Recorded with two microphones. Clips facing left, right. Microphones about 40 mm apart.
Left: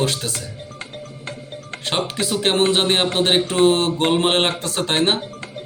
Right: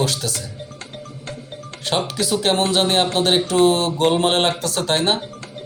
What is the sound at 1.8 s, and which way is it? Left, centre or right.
Speech, left.